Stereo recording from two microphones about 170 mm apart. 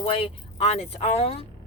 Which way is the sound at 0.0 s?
30° left (ahead or behind).